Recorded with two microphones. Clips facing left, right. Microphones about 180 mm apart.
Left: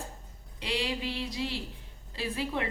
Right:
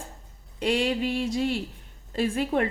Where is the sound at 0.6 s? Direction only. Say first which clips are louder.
Right 8 dB; 50° right (ahead or behind).